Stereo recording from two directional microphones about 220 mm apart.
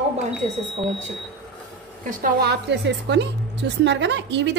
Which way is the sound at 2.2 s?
50° right (ahead or behind).